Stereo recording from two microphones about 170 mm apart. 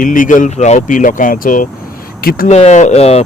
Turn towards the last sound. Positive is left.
turn(degrees=35)  # may be behind; listen again after turning